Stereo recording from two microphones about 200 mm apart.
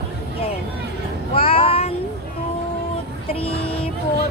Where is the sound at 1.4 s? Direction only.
30° left (ahead or behind).